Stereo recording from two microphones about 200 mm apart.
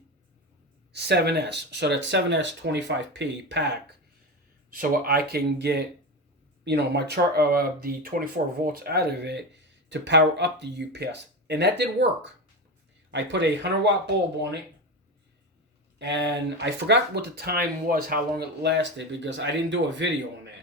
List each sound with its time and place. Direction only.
0.9 s speech: 55° right (ahead or behind)
4.7 s speech: 45° right (ahead or behind)
16.0 s speech: 60° right (ahead or behind)